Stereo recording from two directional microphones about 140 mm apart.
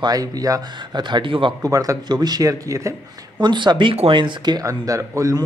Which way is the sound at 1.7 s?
25° right (ahead or behind).